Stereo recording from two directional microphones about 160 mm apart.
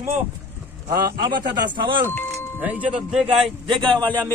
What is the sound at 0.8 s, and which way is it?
A man's voice, 25° right (ahead or behind).